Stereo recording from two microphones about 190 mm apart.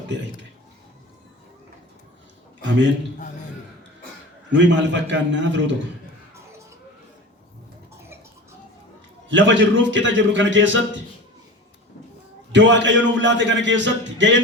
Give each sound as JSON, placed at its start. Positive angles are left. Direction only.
{"t": 2.6, "sound": "a man's voice", "side_deg": -75}
{"t": 4.5, "sound": "a man's voice", "side_deg": -70}
{"t": 9.3, "sound": "a man's voice", "side_deg": -75}
{"t": 12.5, "sound": "a man's voice", "side_deg": -70}